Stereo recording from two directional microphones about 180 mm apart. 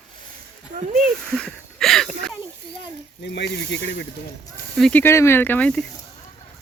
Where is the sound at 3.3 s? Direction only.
70° left (ahead or behind).